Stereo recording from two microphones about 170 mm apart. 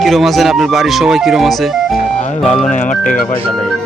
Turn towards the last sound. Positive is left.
turn(degrees=50)  # may be behind; listen again after turning